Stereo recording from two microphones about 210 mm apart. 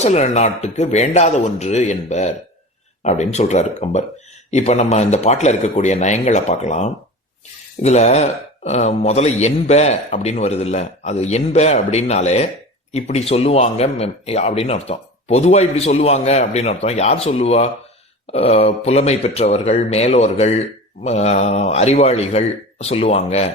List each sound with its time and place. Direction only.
0.0 s speech: 30° left (ahead or behind)